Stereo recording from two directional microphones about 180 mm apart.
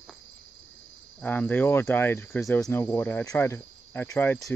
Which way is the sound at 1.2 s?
10° left (ahead or behind).